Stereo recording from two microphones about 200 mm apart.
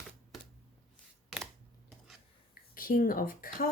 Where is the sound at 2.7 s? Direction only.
45° left (ahead or behind).